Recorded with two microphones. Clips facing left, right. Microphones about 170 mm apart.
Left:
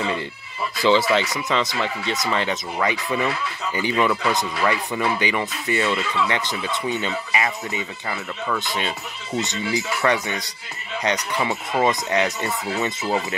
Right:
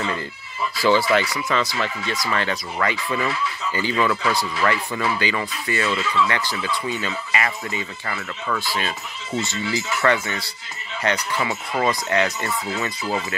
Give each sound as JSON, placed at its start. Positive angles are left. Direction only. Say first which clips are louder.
{"t": 0.7, "sound": "speech", "louder": "even", "side_deg": 20}